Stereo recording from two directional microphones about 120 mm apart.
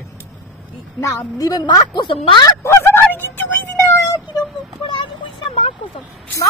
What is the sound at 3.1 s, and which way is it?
Music, 15° left (ahead or behind).